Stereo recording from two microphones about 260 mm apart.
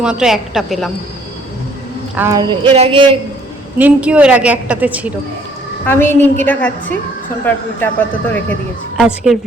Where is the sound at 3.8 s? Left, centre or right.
Centre.